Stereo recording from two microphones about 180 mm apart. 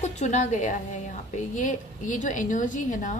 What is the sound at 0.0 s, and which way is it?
A woman's voice, 40° left (ahead or behind).